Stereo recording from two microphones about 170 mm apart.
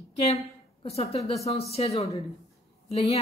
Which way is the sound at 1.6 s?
35° left (ahead or behind).